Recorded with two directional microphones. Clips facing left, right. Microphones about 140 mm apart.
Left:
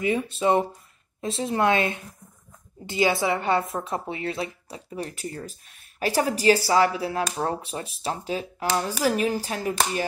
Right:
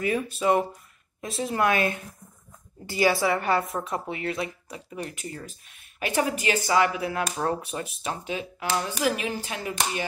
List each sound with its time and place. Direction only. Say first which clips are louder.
0.0 s a woman's voice: left 2 dB; 25° left (ahead or behind)